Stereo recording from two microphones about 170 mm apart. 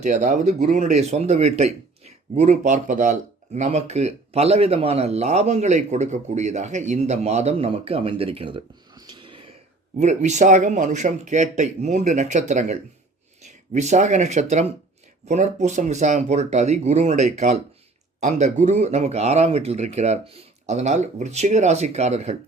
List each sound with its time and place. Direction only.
0.0 s speech: 45° right (ahead or behind); by 9.4 s 25° right (ahead or behind)
10.0 s speech: 45° right (ahead or behind)